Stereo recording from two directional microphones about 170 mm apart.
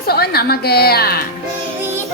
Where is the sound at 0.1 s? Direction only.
65° left (ahead or behind).